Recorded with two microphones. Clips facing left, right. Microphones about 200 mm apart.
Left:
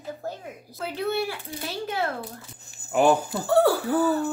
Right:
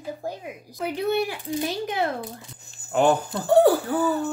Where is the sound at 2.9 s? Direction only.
10° left (ahead or behind).